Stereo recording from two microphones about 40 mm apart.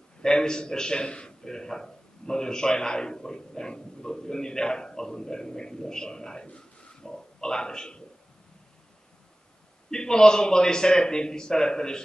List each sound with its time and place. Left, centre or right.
0.2 s a man's voice: centre
9.8 s a man's voice: centre